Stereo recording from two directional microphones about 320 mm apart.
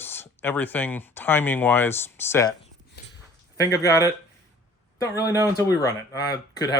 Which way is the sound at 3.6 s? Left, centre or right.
Centre.